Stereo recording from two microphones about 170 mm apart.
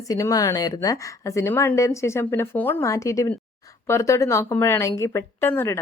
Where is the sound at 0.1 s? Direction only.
20° left (ahead or behind).